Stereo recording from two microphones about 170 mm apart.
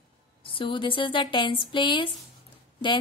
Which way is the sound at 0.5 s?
30° left (ahead or behind).